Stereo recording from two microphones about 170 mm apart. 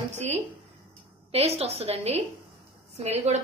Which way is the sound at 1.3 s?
35° right (ahead or behind).